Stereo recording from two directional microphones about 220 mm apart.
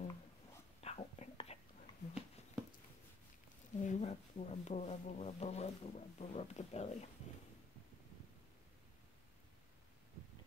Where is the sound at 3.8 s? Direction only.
30° left (ahead or behind).